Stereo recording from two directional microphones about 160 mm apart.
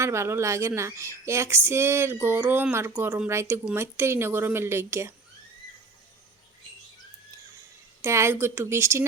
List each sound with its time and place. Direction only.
0.0 s speech: 15° right (ahead or behind)
8.0 s speech: 15° right (ahead or behind)